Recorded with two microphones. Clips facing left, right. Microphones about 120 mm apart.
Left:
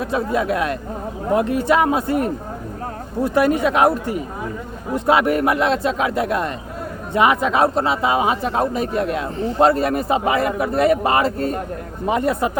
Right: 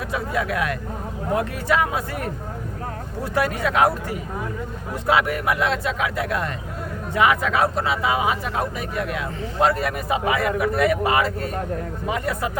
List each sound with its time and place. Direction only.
0.1 s speech: 25° left (ahead or behind)